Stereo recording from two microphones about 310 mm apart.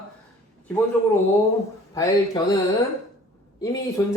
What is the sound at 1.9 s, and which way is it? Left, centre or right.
Speech, centre.